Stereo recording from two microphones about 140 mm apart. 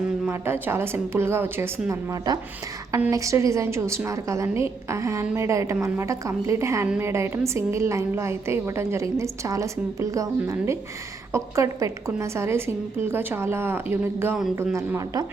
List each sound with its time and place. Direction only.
0.3 s a woman's voice: 15° right (ahead or behind)